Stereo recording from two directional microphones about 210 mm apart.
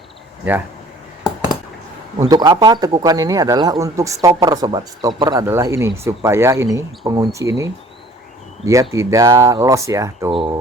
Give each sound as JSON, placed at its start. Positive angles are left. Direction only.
{"t": 2.2, "sound": "speech", "side_deg": -20}
{"t": 10.3, "sound": "speech", "side_deg": -25}